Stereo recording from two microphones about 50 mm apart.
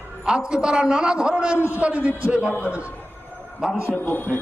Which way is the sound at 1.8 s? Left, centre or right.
Right.